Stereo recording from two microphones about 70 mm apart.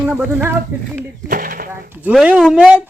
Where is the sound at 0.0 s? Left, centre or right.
Right.